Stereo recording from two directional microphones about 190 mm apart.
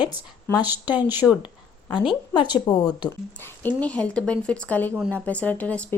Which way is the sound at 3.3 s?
10° left (ahead or behind).